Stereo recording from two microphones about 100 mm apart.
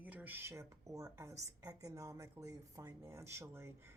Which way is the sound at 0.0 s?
15° right (ahead or behind).